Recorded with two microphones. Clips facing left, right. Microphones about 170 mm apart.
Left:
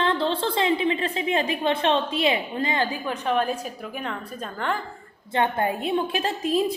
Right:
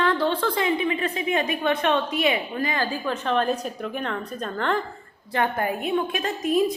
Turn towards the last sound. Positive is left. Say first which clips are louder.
# right 1 dB
turn(degrees=30)  # may be behind; listen again after turning